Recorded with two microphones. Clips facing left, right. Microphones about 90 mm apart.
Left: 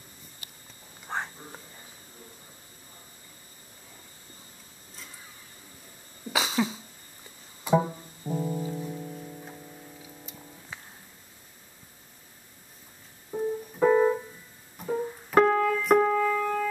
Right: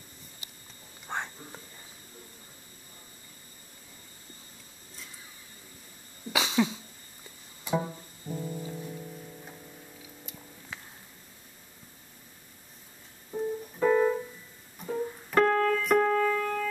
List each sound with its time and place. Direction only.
1.0 s whispering: 5° left (ahead or behind)
6.3 s cough: centre (ahead or behind)
8.3 s music: 30° left (ahead or behind)
8.6 s music: 20° left (ahead or behind)
13.3 s keyboard: 15° left (ahead or behind)